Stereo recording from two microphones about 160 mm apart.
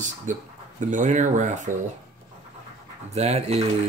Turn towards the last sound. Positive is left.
turn(degrees=-40)  # may be behind; listen again after turning